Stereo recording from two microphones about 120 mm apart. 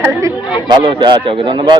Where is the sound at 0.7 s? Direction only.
40° right (ahead or behind).